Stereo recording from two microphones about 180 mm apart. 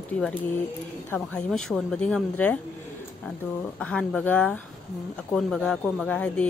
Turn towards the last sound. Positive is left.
turn(degrees=5)  # may be behind; listen again after turning